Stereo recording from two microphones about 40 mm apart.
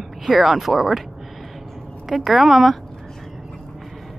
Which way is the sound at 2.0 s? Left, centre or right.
Centre.